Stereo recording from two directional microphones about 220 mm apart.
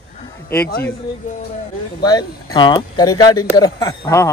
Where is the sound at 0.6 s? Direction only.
45° left (ahead or behind).